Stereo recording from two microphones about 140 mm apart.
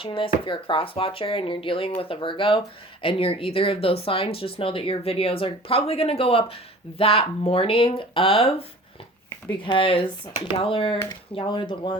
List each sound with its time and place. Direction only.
0.0 s speech: 40° left (ahead or behind)
9.6 s speech: 40° left (ahead or behind)